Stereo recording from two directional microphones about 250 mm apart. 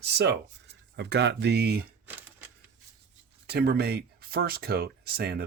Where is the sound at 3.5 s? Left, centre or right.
Right.